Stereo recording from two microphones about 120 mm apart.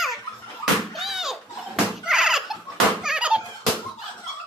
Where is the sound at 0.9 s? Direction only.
Centre (ahead or behind).